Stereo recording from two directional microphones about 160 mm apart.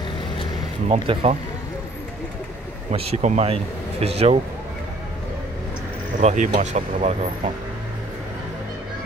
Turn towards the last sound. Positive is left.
turn(degrees=-45)  # may be behind; listen again after turning